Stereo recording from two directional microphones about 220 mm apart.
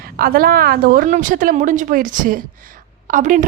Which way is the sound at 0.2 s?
40° right (ahead or behind).